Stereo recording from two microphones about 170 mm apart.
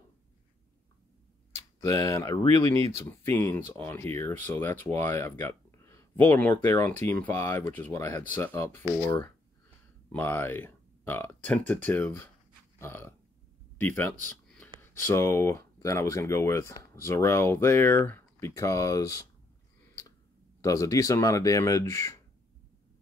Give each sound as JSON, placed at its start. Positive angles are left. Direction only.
{"t": 1.8, "sound": "speech", "side_deg": 20}
{"t": 12.7, "sound": "burping", "side_deg": 15}
{"t": 13.7, "sound": "a sound", "side_deg": 10}
{"t": 14.8, "sound": "speech", "side_deg": 15}
{"t": 20.6, "sound": "speech", "side_deg": 20}